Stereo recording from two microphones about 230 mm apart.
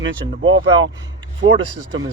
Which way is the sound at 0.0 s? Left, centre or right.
Right.